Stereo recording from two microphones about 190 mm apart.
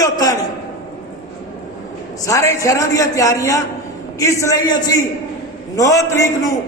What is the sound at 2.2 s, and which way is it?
A man's voice, 15° left (ahead or behind).